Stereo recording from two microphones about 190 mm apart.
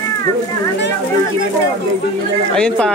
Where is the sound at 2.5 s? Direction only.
5° left (ahead or behind).